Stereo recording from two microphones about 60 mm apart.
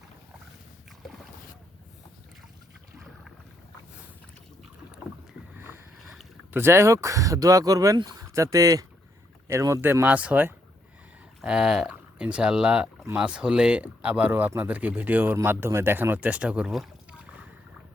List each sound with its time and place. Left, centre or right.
5.5 s boat: right
6.5 s speech: right
9.5 s speech: right
9.8 s speech: right
10.1 s speech: right
11.4 s speech: centre